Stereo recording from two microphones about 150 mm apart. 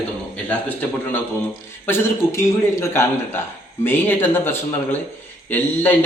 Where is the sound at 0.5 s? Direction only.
10° left (ahead or behind).